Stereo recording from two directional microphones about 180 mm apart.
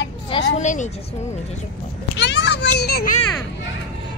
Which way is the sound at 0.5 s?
40° left (ahead or behind).